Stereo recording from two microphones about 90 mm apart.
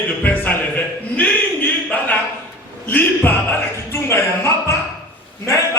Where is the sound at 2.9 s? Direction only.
20° left (ahead or behind).